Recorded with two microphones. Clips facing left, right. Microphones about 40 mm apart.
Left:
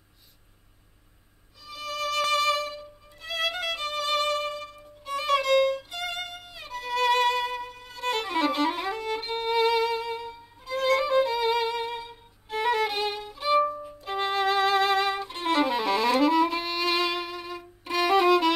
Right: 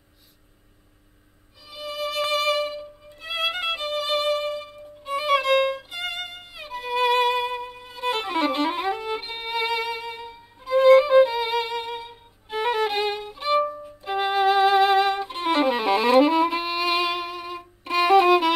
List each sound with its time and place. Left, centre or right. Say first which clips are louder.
1.7 s violin: right 1 dB; centre
2.3 s music: right 2 dB; centre
3.8 s violin: right 2 dB; centre